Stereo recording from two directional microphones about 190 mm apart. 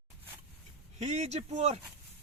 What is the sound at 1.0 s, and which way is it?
Speech, 35° right (ahead or behind).